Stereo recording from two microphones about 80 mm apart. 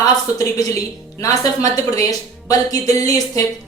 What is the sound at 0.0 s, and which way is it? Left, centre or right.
A woman's voice, left.